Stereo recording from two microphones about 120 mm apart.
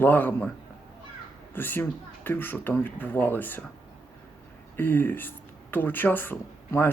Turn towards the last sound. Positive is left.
turn(degrees=15)  # may be behind; listen again after turning